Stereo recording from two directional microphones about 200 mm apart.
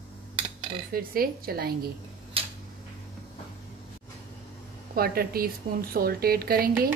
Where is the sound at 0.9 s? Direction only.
45° right (ahead or behind).